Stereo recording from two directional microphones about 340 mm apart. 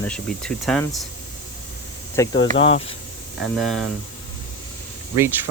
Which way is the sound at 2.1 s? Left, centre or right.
Centre.